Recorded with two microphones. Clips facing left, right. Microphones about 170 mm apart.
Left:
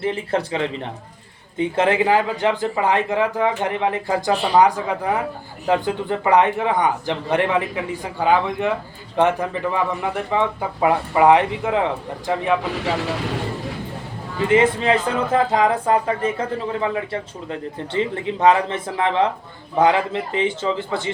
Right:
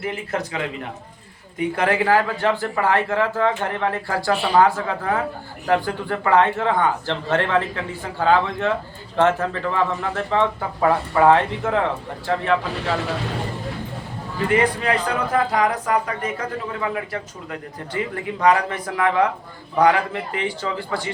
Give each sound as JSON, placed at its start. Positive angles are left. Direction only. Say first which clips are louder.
{"t": 0.0, "sound": "speech", "louder": "left 4 dB", "side_deg": 30}
{"t": 14.4, "sound": "speech", "louder": "left 3 dB", "side_deg": 25}